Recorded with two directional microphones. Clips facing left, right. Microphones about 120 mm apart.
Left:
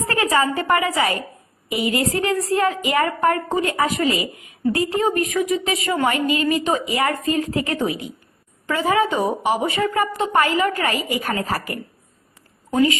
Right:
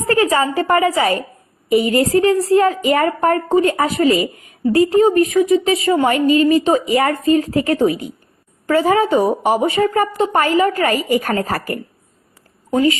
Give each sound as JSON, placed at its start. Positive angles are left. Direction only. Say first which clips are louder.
{"t": 0.0, "sound": "a woman's voice", "louder": "right 4 dB", "side_deg": -30}